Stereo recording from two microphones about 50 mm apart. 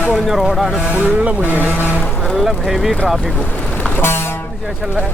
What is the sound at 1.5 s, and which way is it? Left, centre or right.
Speech, right.